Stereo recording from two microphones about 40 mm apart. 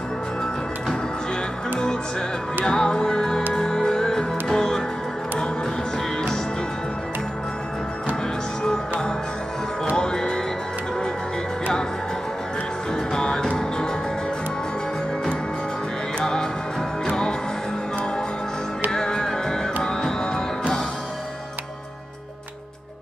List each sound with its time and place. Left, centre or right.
2.6 s music: centre
9.9 s music: left
13.1 s music: centre
17.0 s music: centre
18.9 s music: centre